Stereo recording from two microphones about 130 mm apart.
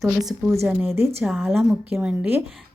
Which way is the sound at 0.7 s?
20° right (ahead or behind).